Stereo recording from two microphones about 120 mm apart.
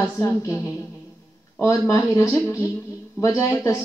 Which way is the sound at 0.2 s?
25° left (ahead or behind).